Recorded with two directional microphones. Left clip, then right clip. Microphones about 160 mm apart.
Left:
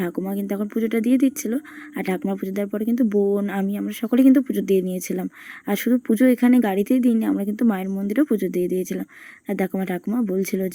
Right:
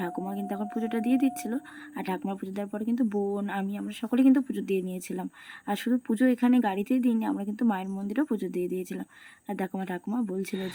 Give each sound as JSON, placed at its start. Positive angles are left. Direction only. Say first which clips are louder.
{"t": 0.0, "sound": "speech", "louder": "left 6 dB", "side_deg": 20}